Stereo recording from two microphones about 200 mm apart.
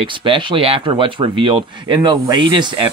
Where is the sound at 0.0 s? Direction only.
25° right (ahead or behind).